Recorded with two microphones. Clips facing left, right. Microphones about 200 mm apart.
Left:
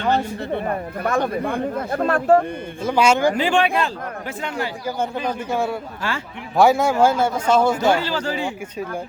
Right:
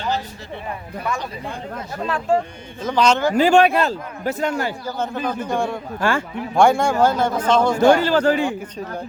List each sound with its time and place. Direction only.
0.0 s speech: 60° left (ahead or behind)
2.8 s a man's voice: 10° left (ahead or behind)
3.3 s speech: 40° right (ahead or behind)
4.9 s a man's voice: 10° left (ahead or behind)
6.0 s speech: 50° right (ahead or behind)
6.6 s a man's voice: 5° left (ahead or behind)
7.9 s speech: 50° right (ahead or behind)